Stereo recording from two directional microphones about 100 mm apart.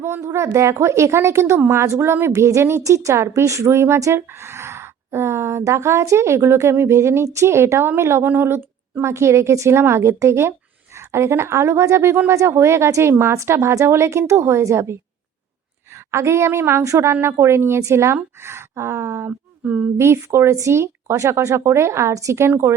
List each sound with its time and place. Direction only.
0.0 s speech: 30° right (ahead or behind)
16.1 s speech: 25° right (ahead or behind)
19.3 s a sound: 10° right (ahead or behind)
20.0 s speech: 25° right (ahead or behind)